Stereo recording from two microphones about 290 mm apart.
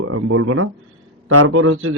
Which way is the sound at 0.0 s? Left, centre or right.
Right.